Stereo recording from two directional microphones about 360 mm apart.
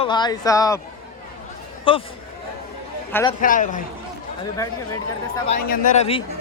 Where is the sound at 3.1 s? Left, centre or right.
Centre.